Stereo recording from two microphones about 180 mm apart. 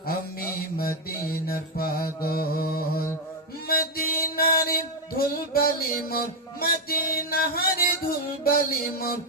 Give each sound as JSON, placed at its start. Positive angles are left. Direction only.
{"t": 0.1, "sound": "mantra", "side_deg": 55}
{"t": 6.8, "sound": "music", "side_deg": 55}